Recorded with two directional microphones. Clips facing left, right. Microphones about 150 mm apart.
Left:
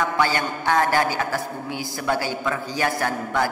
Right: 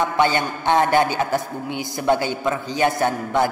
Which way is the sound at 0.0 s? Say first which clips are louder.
Right 3 dB; 20° right (ahead or behind).